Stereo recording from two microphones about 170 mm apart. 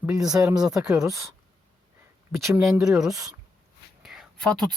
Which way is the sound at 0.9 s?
20° right (ahead or behind).